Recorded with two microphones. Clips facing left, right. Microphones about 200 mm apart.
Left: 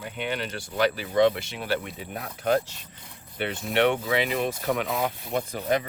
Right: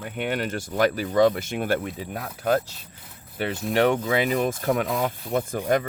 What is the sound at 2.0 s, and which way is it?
Speech, 40° right (ahead or behind).